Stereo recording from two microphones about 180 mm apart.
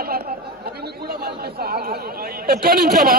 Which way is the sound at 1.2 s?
60° right (ahead or behind).